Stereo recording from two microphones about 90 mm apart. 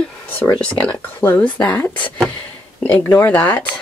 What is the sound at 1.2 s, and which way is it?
Speech, 15° left (ahead or behind).